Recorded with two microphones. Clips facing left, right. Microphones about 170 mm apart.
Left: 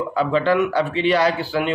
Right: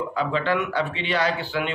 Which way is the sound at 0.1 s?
35° left (ahead or behind).